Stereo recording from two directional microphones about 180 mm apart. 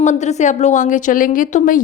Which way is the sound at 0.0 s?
40° left (ahead or behind).